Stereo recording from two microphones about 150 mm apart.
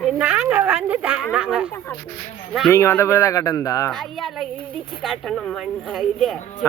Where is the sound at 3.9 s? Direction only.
Centre (ahead or behind).